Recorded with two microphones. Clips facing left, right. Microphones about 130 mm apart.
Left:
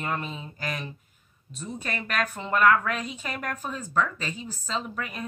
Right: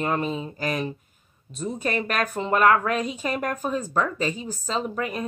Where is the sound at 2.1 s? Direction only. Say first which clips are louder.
Right 4 dB; 35° right (ahead or behind).